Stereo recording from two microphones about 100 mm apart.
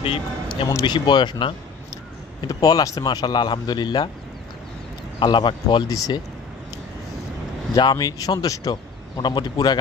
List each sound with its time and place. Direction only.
0.0 s a man's voice: 60° left (ahead or behind)
0.8 s a man's voice: 50° left (ahead or behind)
2.4 s a man's voice: 40° left (ahead or behind)
5.2 s a man's voice: 50° left (ahead or behind)
5.9 s speech: 35° left (ahead or behind)
7.7 s a man's voice: 45° left (ahead or behind)